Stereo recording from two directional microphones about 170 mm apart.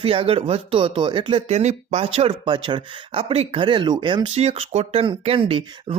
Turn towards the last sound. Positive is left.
turn(degrees=-35)  # may be behind; listen again after turning